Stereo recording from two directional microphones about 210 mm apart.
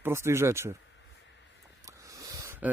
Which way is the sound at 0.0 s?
10° right (ahead or behind).